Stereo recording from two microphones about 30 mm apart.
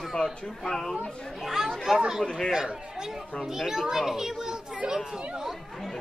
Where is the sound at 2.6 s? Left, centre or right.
Right.